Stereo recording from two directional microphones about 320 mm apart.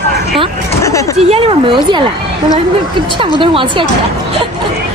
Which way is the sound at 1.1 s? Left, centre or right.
Centre.